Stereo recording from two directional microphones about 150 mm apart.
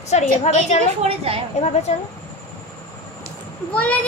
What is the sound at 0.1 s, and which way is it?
Speech, 45° left (ahead or behind).